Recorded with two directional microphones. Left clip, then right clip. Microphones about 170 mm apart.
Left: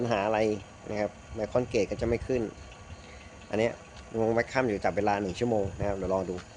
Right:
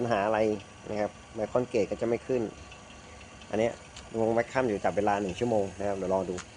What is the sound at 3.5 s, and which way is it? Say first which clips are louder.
Speech: even; 15° left (ahead or behind).